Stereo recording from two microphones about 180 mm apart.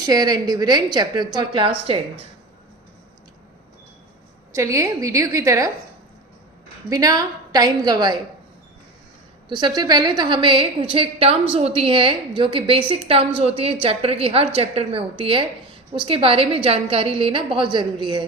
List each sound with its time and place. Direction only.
0.0 s a woman's voice: 20° right (ahead or behind)
4.5 s a woman's voice: 15° right (ahead or behind)
6.9 s a woman's voice: 20° right (ahead or behind)
9.5 s a woman's voice: 25° right (ahead or behind)